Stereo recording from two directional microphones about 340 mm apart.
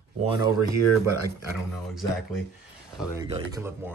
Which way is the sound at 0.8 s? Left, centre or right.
Left.